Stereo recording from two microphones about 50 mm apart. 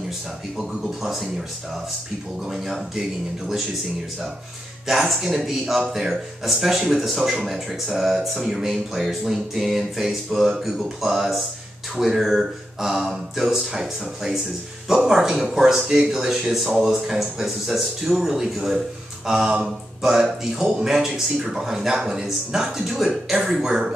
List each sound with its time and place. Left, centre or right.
1.0 s speech: centre
4.8 s a man's voice: centre